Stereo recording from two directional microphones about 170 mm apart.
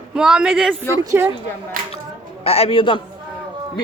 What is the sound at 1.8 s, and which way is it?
Speech, 55° right (ahead or behind).